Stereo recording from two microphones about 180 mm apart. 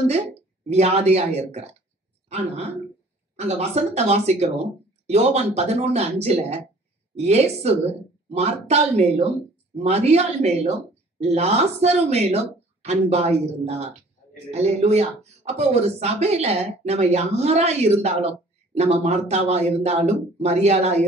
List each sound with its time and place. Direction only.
0.7 s speech: 35° right (ahead or behind)